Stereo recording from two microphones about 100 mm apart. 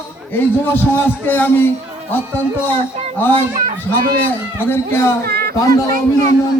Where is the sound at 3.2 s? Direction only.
20° left (ahead or behind).